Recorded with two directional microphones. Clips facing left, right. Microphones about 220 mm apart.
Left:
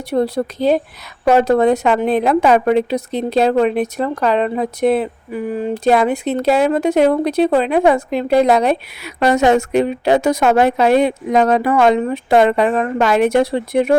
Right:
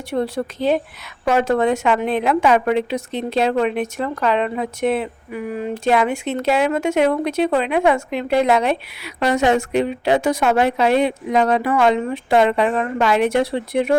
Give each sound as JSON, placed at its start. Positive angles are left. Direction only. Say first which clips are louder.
{"t": 0.1, "sound": "a woman's voice", "louder": "left 4 dB", "side_deg": 40}